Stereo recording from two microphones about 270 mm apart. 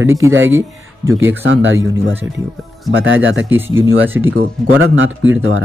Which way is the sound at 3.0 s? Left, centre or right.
Right.